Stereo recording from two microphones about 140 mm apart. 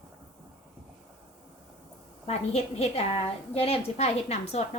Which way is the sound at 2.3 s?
50° left (ahead or behind).